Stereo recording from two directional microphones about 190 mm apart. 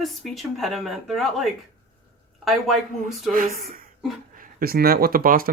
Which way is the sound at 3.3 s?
45° right (ahead or behind).